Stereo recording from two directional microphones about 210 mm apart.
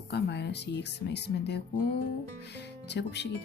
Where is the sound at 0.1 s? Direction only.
55° left (ahead or behind).